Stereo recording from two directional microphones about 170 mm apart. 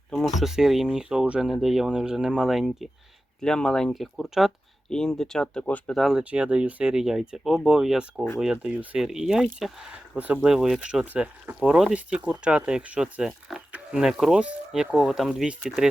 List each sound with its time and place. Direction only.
0.1 s speech: centre (ahead or behind)